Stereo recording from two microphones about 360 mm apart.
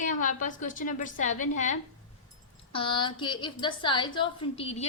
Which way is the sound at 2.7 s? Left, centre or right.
Centre.